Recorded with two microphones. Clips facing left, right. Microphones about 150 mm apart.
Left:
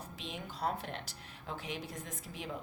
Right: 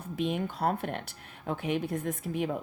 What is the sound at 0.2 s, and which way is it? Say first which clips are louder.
Speech: right 10 dB; 55° right (ahead or behind).